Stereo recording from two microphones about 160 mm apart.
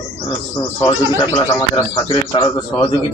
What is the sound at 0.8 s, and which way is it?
Speech, 25° left (ahead or behind).